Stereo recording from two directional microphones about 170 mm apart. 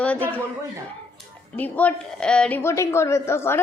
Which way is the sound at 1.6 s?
10° left (ahead or behind).